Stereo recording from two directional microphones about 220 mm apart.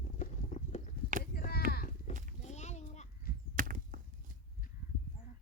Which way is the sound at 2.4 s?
30° left (ahead or behind).